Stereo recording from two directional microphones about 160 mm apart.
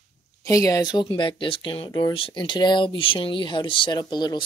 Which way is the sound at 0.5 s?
20° left (ahead or behind).